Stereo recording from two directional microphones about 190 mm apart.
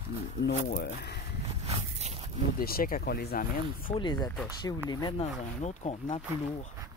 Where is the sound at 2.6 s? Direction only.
50° left (ahead or behind).